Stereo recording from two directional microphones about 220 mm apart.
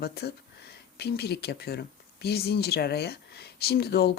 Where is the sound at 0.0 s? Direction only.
45° left (ahead or behind).